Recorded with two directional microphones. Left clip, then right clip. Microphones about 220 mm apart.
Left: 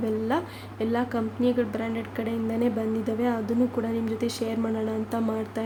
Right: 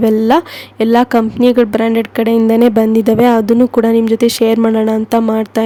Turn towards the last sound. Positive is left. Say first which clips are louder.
# right 16 dB
turn(degrees=-45)  # may be behind; listen again after turning